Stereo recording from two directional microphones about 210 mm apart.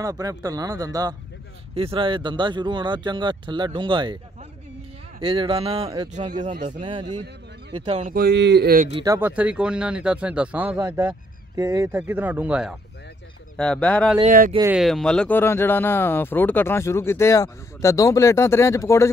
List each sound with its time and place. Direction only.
0.0 s speech: 15° right (ahead or behind)
5.2 s speech: 25° right (ahead or behind)
8.1 s speech: 50° right (ahead or behind)
9.0 s speech: 10° right (ahead or behind); by 14.1 s 5° left (ahead or behind)
14.2 s speech: 40° right (ahead or behind)
14.6 s speech: 5° right (ahead or behind); by 19.0 s 15° left (ahead or behind)